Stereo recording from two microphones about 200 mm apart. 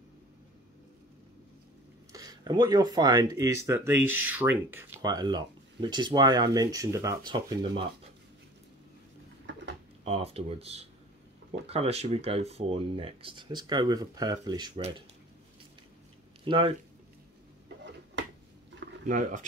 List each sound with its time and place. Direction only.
2.1 s speech: 20° right (ahead or behind)
10.0 s speech: 30° right (ahead or behind)
16.4 s speech: 25° right (ahead or behind)
19.0 s speech: 40° right (ahead or behind)